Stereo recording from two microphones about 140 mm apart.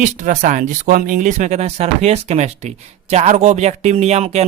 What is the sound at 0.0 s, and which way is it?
Speech, 65° right (ahead or behind).